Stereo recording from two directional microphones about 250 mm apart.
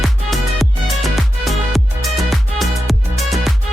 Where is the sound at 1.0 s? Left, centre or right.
Centre.